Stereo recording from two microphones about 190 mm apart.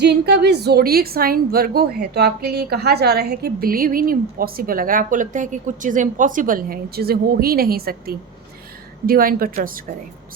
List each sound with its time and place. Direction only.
0.0 s a woman's voice: 60° right (ahead or behind)